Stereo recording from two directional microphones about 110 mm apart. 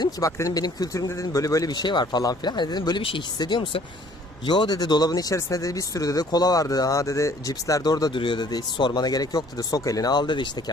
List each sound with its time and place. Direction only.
0.0 s speech: 30° left (ahead or behind)
3.0 s speech: 55° left (ahead or behind)
3.3 s speech: 40° left (ahead or behind)
4.4 s speech: 40° left (ahead or behind)
8.1 s speech: 50° left (ahead or behind)